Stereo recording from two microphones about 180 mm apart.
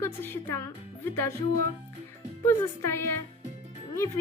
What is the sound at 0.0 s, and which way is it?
Speech, 10° left (ahead or behind).